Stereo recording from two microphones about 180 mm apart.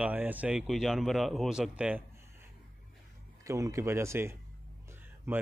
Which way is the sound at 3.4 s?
15° right (ahead or behind).